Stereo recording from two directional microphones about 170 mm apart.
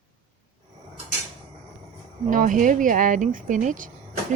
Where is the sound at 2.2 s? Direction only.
50° right (ahead or behind).